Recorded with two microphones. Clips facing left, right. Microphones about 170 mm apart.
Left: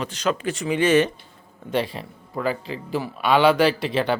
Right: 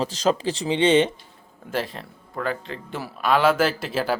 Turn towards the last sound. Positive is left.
turn(degrees=-5)  # may be behind; listen again after turning